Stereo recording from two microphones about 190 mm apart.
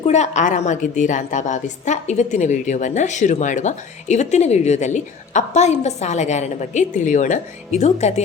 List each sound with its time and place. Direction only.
0.0 s a woman's voice: 35° left (ahead or behind)